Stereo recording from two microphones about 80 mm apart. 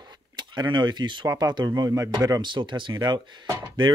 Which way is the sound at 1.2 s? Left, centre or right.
Right.